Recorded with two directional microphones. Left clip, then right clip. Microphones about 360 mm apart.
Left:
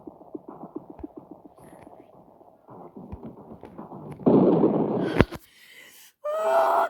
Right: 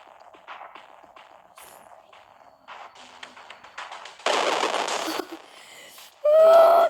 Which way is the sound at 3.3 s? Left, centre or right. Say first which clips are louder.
Right 4 dB; right.